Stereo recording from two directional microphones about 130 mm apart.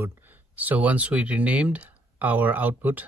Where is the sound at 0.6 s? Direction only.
10° right (ahead or behind).